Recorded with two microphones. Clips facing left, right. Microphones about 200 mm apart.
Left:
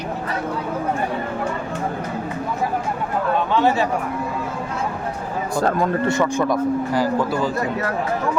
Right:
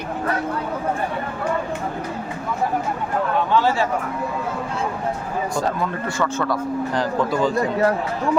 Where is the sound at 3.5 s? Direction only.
20° left (ahead or behind).